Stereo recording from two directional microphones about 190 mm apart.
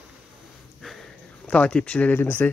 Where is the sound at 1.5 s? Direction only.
5° left (ahead or behind).